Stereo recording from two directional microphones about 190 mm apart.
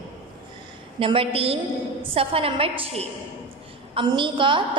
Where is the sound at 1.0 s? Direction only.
30° right (ahead or behind).